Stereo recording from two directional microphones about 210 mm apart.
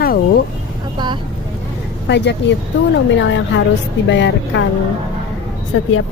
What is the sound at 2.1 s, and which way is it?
Speech, 55° left (ahead or behind).